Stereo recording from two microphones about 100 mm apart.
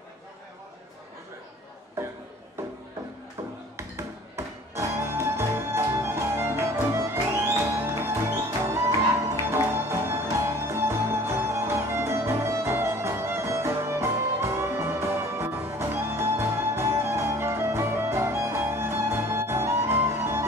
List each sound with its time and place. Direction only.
3.7 s music: 30° right (ahead or behind)